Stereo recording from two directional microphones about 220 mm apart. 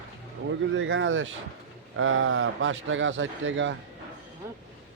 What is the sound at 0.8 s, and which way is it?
A man's voice, 60° right (ahead or behind).